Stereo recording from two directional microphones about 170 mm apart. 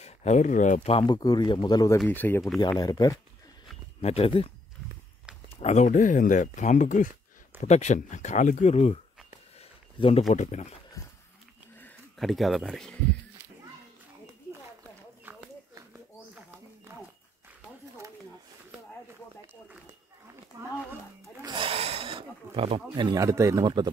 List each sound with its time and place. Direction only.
0.0 s speech: 40° left (ahead or behind)
1.0 s speech: 25° left (ahead or behind)
2.0 s speech: 10° left (ahead or behind)
2.6 s speech: 25° left (ahead or behind)
4.0 s speech: 35° left (ahead or behind)
5.6 s speech: 40° left (ahead or behind)
9.6 s a sound: 35° left (ahead or behind)
10.3 s speech: 45° left (ahead or behind)
11.8 s speech: centre (ahead or behind)
14.8 s a sound: 15° right (ahead or behind)
20.5 s speech: 15° right (ahead or behind)
21.2 s a sound: 20° right (ahead or behind)
21.5 s a sound: 35° right (ahead or behind)
22.9 s speech: 25° right (ahead or behind)